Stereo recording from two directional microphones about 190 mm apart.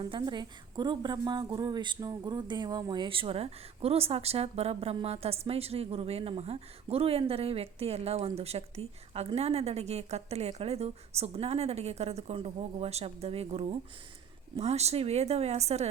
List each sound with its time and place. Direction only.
0.0 s a woman's voice: 20° right (ahead or behind)